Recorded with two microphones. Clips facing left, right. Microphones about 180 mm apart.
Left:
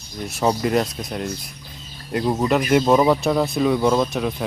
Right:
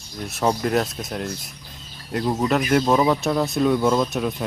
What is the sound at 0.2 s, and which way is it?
Speech, centre (ahead or behind).